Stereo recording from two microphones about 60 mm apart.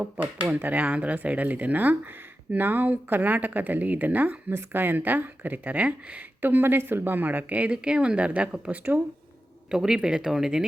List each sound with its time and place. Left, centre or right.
0.0 s speech: right
6.4 s speech: right; by 10.7 s centre